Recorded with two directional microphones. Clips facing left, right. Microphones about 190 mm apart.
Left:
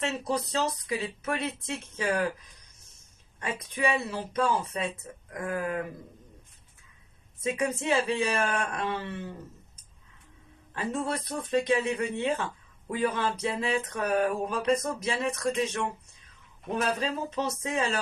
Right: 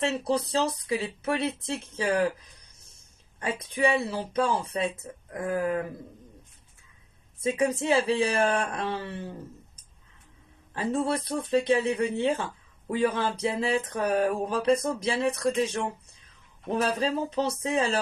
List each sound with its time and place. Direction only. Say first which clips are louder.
0.0 s speech: right 4 dB; 30° right (ahead or behind)
3.4 s speech: right 3 dB; 30° right (ahead or behind)
7.4 s speech: right 3 dB; 30° right (ahead or behind)
10.8 s speech: right 4 dB; 30° right (ahead or behind)